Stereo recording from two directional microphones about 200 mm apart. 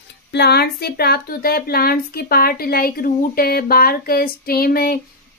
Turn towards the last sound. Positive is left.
turn(degrees=50)  # may be behind; listen again after turning